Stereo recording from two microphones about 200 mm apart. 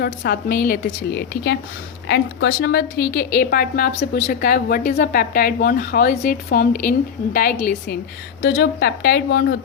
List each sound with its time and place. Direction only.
0.0 s a woman's voice: 55° left (ahead or behind)
8.4 s a woman's voice: 60° left (ahead or behind)